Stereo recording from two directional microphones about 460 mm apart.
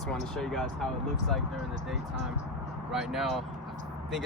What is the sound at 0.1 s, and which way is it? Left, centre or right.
Speech, centre.